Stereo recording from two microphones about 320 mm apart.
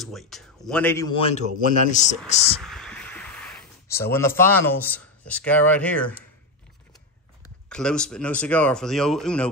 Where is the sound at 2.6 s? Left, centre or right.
Centre.